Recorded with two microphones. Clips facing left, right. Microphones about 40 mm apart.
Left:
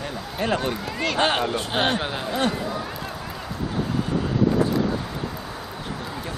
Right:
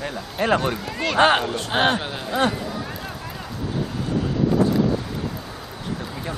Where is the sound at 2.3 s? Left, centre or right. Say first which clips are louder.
Right 4 dB; centre.